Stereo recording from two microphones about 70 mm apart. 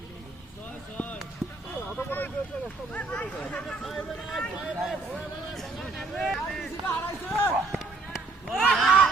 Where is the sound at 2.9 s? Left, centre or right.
Centre.